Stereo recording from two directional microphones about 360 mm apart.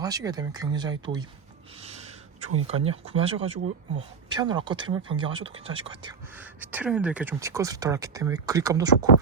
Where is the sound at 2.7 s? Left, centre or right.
Centre.